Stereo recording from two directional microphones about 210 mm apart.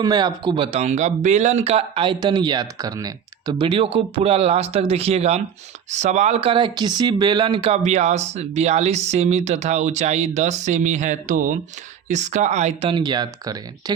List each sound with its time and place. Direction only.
0.0 s speech: 20° right (ahead or behind)